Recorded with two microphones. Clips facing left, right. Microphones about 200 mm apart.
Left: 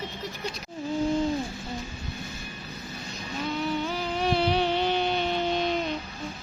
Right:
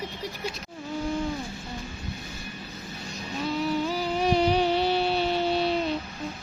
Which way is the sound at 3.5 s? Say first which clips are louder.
Right 3 dB; centre (ahead or behind).